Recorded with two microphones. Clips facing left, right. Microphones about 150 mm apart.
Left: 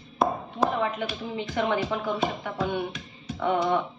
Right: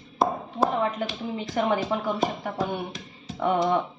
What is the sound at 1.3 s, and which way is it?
Speech, 40° right (ahead or behind).